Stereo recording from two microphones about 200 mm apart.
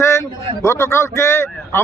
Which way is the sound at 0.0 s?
15° left (ahead or behind).